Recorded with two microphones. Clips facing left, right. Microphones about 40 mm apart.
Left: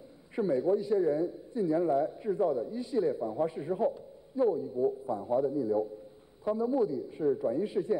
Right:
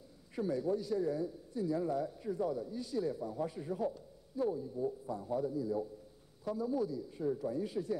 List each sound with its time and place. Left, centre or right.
0.4 s a man's voice: left